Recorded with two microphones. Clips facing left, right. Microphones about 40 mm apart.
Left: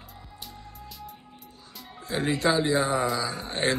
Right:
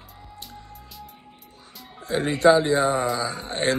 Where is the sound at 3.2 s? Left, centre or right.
Right.